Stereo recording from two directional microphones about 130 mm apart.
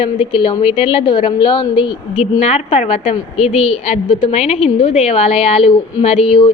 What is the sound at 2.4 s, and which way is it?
A woman's voice, 50° left (ahead or behind).